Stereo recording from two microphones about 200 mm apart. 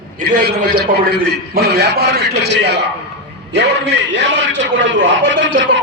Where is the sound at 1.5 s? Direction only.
50° right (ahead or behind).